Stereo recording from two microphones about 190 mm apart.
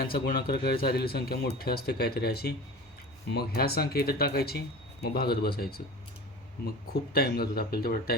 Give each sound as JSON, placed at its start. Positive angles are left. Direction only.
{"t": 0.1, "sound": "speech", "side_deg": 55}
{"t": 7.1, "sound": "a man's voice", "side_deg": 55}